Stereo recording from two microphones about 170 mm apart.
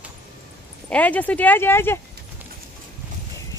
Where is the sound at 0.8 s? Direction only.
10° left (ahead or behind).